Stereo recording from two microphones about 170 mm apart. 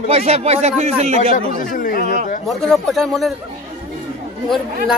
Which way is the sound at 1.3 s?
50° left (ahead or behind).